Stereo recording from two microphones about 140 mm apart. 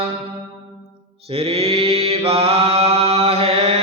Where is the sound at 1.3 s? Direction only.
45° right (ahead or behind).